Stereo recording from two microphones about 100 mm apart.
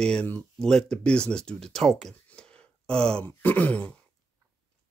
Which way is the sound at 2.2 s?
10° left (ahead or behind).